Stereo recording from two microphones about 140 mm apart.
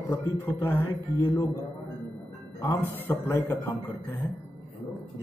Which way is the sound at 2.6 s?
15° left (ahead or behind).